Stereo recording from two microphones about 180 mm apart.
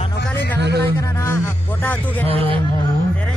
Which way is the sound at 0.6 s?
65° right (ahead or behind).